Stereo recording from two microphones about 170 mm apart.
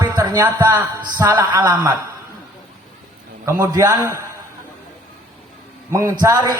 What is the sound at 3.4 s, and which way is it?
Speech, 20° right (ahead or behind).